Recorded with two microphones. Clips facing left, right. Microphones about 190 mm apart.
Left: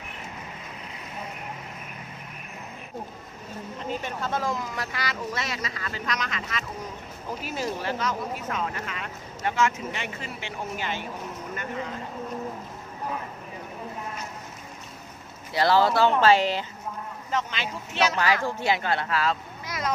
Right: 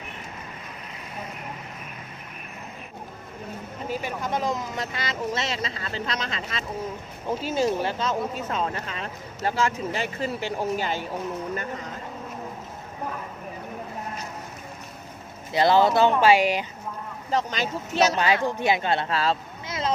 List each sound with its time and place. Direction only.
3.8 s speech: 10° right (ahead or behind); by 11.0 s 40° right (ahead or behind)
15.5 s speech: 20° right (ahead or behind)
17.3 s speech: 40° right (ahead or behind)
18.2 s speech: 20° right (ahead or behind)